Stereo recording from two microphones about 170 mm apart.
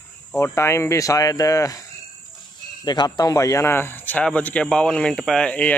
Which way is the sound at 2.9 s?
25° left (ahead or behind).